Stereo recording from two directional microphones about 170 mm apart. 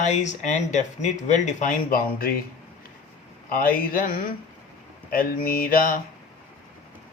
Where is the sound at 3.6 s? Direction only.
55° left (ahead or behind).